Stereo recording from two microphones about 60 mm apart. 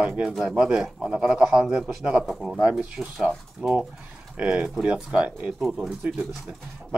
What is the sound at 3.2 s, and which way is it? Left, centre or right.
Speech, centre.